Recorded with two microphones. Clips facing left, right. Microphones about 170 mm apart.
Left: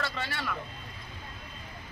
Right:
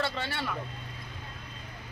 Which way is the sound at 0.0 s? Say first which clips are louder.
Right 2 dB; 30° right (ahead or behind).